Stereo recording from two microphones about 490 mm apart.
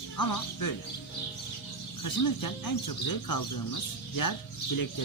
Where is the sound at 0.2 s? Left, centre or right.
Left.